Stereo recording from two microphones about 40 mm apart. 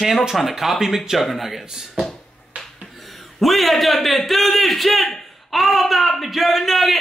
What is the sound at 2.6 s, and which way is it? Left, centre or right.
A man's voice, centre.